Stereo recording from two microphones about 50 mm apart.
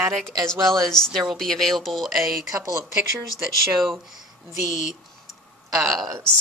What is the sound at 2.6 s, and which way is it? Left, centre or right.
Speech, right.